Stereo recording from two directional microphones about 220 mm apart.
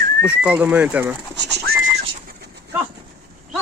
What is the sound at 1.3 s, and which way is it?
Speech, 50° right (ahead or behind).